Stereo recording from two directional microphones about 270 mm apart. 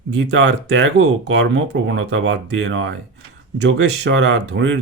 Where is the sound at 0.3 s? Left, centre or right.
Right.